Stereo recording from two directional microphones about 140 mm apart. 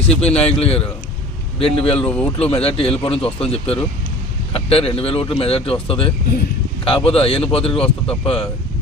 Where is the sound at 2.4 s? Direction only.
45° left (ahead or behind).